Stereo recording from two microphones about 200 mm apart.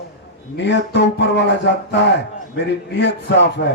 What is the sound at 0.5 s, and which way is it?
Speech, 60° left (ahead or behind).